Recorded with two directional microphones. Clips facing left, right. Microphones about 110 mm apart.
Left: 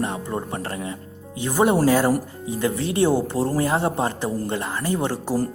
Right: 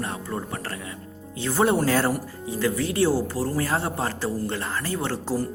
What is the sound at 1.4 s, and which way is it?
A woman's voice, 15° left (ahead or behind).